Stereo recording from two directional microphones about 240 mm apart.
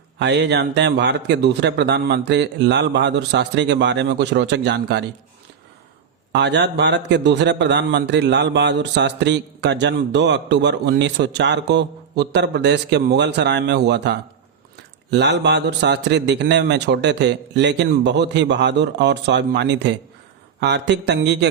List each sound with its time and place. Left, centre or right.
0.2 s a man's voice: right
6.3 s a man's voice: right